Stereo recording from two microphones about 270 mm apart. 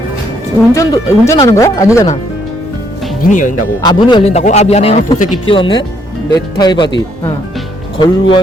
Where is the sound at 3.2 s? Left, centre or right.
Left.